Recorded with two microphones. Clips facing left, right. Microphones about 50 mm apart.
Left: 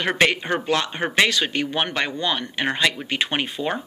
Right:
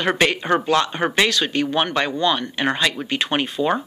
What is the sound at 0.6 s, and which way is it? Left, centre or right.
Speech, left.